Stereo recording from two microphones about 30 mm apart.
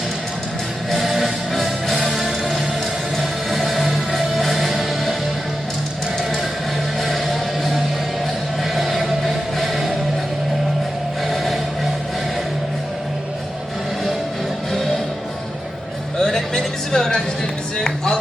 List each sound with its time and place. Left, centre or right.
0.9 s music: centre
7.0 s music: centre
11.3 s music: centre
16.1 s a sound: centre
17.7 s music: left